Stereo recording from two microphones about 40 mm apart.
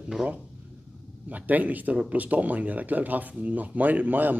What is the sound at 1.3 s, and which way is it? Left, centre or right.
A man's voice, right.